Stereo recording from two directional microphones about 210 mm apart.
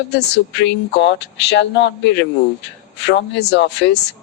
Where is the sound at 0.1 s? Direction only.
55° left (ahead or behind).